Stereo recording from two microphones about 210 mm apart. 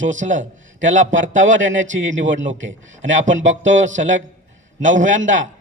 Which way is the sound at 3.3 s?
65° right (ahead or behind).